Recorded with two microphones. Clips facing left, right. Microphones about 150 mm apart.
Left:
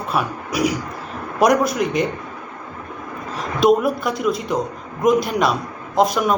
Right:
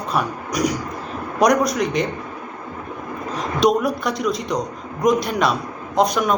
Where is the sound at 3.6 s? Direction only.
5° left (ahead or behind).